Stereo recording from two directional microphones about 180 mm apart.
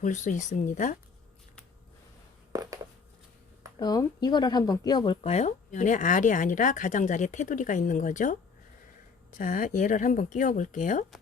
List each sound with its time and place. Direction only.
0.0 s speech: 45° left (ahead or behind)
2.5 s a sound: 20° right (ahead or behind)
3.8 s speech: 25° left (ahead or behind); by 8.4 s 45° left (ahead or behind)
9.4 s speech: 50° left (ahead or behind)